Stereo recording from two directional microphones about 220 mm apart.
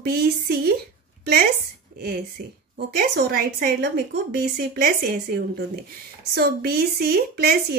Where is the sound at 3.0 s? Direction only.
45° right (ahead or behind).